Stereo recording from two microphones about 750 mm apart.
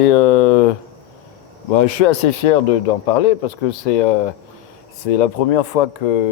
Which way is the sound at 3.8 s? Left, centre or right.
Left.